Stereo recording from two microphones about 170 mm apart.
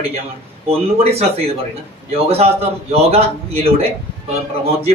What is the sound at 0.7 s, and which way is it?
Speech, 35° right (ahead or behind).